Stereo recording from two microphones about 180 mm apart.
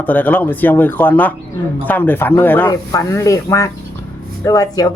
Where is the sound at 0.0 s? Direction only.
10° left (ahead or behind).